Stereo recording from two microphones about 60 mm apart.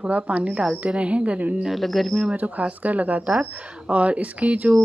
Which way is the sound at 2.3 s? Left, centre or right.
Right.